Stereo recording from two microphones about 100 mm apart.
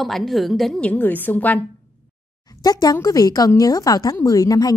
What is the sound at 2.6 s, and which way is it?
A woman's voice, 40° left (ahead or behind).